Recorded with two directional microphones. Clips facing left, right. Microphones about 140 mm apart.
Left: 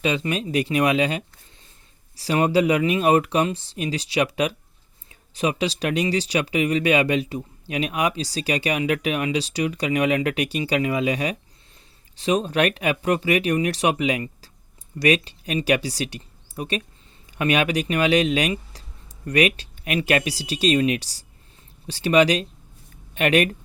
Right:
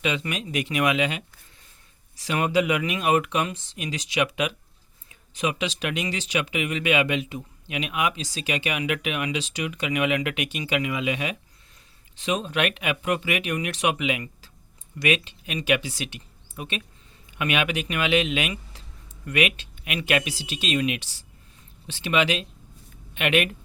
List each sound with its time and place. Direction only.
0.0 s speech: 35° left (ahead or behind)